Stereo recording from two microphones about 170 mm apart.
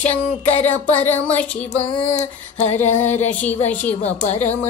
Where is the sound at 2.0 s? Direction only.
40° left (ahead or behind).